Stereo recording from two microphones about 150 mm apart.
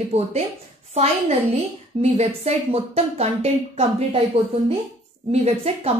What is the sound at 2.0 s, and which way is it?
Speech, 45° right (ahead or behind).